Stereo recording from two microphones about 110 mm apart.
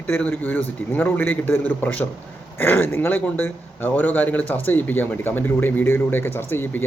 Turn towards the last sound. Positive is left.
turn(degrees=20)  # may be behind; listen again after turning